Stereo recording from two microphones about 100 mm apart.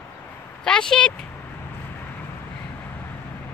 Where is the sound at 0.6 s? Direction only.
5° left (ahead or behind).